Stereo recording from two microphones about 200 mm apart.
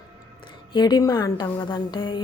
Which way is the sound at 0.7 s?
20° left (ahead or behind).